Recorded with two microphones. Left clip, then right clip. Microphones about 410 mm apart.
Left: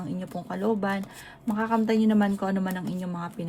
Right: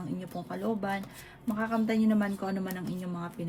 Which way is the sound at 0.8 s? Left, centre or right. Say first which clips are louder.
Left 4 dB; left.